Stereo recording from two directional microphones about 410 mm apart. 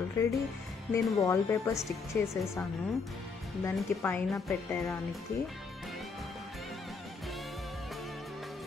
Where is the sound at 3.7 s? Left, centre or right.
Centre.